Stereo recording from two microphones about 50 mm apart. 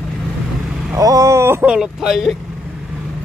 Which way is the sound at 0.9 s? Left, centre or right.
Right.